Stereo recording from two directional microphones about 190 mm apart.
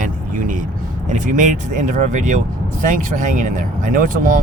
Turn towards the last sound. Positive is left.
turn(degrees=-45)  # may be behind; listen again after turning